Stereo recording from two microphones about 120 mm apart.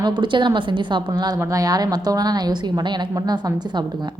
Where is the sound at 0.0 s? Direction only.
40° right (ahead or behind).